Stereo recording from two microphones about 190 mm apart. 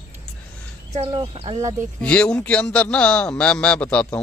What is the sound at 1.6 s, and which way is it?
Speech, 15° right (ahead or behind).